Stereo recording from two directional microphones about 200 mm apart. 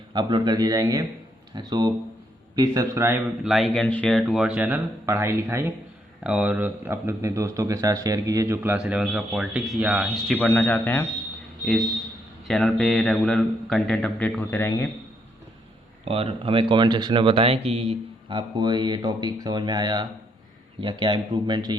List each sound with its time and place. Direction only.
0.1 s a man's voice: 20° right (ahead or behind)
3.4 s a man's voice: centre (ahead or behind)
10.3 s speech: 10° left (ahead or behind)
12.5 s a man's voice: 5° left (ahead or behind)
16.0 s speech: 30° right (ahead or behind)